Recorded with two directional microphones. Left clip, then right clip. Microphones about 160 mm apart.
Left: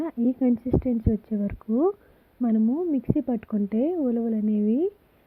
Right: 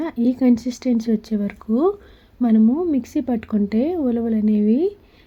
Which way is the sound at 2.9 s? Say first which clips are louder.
Right 4 dB; 35° left (ahead or behind).